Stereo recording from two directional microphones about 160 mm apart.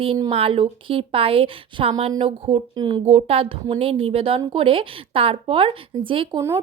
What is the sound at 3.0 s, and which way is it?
Speech, 40° right (ahead or behind).